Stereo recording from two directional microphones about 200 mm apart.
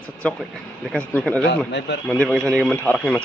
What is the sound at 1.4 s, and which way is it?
Speech, 60° left (ahead or behind).